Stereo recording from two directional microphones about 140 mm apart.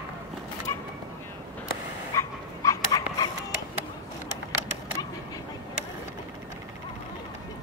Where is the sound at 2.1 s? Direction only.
25° left (ahead or behind).